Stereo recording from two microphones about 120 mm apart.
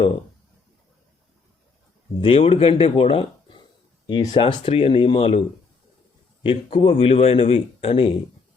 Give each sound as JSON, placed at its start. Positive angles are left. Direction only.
{"t": 2.2, "sound": "speech", "side_deg": 50}
{"t": 6.4, "sound": "speech", "side_deg": 50}